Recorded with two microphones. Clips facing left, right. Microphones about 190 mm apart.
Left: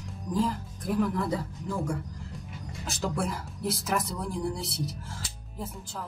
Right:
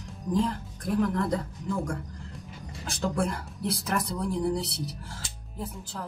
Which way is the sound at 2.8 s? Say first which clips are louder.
Right 2 dB; centre (ahead or behind).